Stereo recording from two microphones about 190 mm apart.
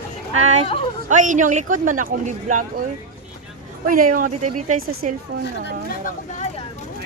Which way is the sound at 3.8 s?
45° right (ahead or behind).